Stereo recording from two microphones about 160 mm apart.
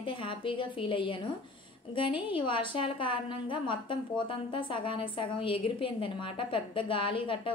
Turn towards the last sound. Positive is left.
turn(degrees=30)  # may be behind; listen again after turning